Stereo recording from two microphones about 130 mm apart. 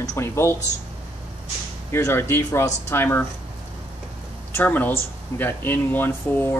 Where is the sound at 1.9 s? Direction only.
20° left (ahead or behind).